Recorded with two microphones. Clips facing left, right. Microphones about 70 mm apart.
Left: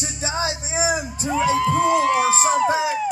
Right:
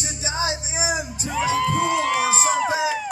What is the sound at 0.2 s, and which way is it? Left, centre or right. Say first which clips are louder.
Music: left 1 dB; left.